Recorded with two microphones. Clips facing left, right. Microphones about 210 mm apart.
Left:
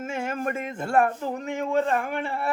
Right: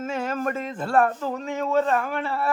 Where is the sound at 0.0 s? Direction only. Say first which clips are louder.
Right 2 dB; 10° left (ahead or behind).